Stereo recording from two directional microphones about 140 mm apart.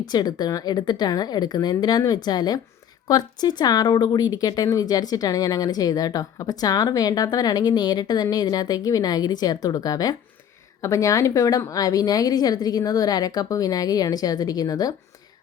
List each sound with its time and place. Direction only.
0.0 s speech: 30° left (ahead or behind)